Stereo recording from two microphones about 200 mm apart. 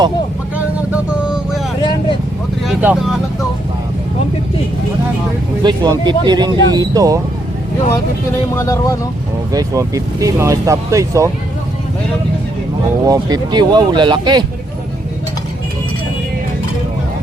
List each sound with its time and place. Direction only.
1.1 s vehicle: 5° right (ahead or behind)
1.8 s vehicle: 20° left (ahead or behind)
2.6 s speech: centre (ahead or behind)
5.6 s speech: 20° right (ahead or behind)
8.5 s speech: 15° left (ahead or behind)
9.5 s speech: 15° right (ahead or behind)
13.1 s speech: 20° right (ahead or behind)